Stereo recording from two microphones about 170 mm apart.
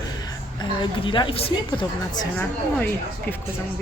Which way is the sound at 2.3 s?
10° left (ahead or behind).